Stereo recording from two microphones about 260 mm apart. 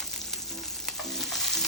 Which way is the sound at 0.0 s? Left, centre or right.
Centre.